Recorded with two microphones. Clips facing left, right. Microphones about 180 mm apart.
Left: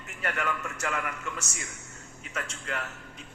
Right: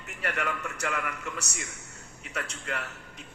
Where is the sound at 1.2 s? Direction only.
35° right (ahead or behind).